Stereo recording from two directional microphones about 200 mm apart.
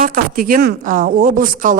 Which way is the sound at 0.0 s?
45° right (ahead or behind).